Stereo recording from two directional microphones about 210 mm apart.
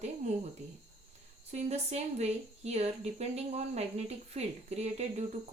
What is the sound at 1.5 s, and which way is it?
Speech, 30° right (ahead or behind).